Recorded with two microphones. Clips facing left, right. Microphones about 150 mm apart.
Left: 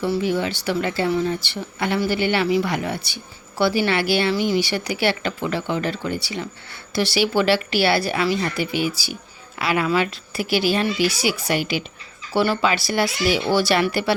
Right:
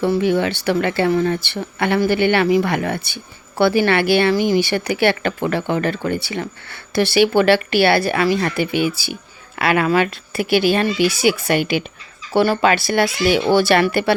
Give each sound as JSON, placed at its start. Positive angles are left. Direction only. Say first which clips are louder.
{"t": 0.0, "sound": "a woman's voice", "louder": "right 5 dB", "side_deg": -60}